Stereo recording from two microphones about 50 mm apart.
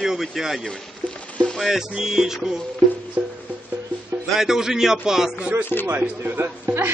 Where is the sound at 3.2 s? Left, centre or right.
Right.